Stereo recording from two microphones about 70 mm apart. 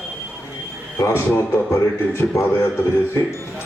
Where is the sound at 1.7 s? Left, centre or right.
Left.